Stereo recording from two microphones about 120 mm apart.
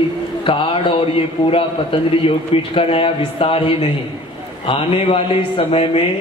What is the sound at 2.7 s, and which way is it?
A man's voice, 50° left (ahead or behind).